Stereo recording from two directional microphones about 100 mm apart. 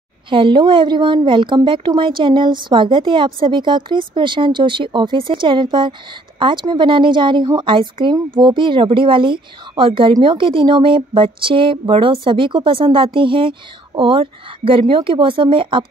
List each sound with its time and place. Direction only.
0.3 s a woman's voice: 55° right (ahead or behind)